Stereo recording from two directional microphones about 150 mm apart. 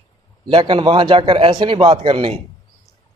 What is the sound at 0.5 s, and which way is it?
A man's voice, 35° right (ahead or behind).